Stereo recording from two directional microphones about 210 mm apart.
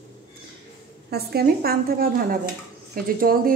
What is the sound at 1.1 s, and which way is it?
A woman's voice, 50° right (ahead or behind).